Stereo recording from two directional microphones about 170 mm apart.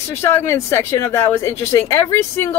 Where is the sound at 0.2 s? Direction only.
15° left (ahead or behind).